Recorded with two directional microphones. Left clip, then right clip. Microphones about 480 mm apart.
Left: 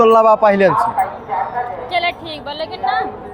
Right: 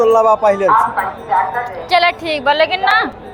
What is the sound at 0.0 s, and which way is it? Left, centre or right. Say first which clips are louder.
Speech: left 1 dB; left.